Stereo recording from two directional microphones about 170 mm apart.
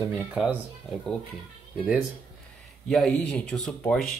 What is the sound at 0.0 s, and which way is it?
Speech, 10° right (ahead or behind).